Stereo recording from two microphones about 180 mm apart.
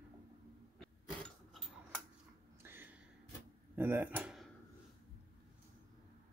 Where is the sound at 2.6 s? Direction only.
10° right (ahead or behind).